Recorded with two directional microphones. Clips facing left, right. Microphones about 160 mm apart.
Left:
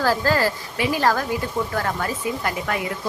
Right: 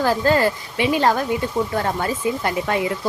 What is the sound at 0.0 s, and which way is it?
A woman's voice, 20° right (ahead or behind).